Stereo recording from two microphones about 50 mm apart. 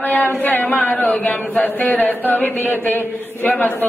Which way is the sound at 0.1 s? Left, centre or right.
Left.